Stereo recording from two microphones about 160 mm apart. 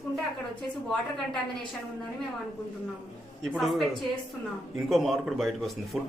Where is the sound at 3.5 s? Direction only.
Centre (ahead or behind).